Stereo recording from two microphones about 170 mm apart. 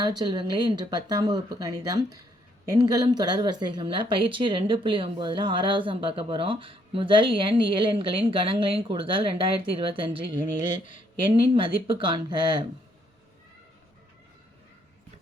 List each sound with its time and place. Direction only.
0.0 s a woman's voice: 25° right (ahead or behind)